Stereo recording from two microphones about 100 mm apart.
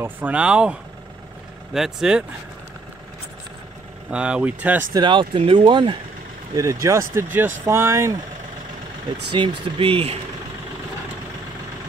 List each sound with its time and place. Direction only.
0.0 s speech: 15° right (ahead or behind)
4.1 s speech: 10° right (ahead or behind)
4.9 s speech: 50° right (ahead or behind)
6.5 s speech: 35° right (ahead or behind)
9.4 s speech: 60° right (ahead or behind)